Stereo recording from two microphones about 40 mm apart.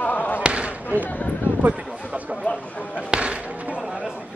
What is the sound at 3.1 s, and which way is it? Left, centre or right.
Basketball bounce, right.